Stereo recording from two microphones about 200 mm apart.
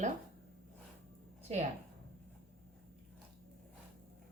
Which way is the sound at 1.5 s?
35° right (ahead or behind).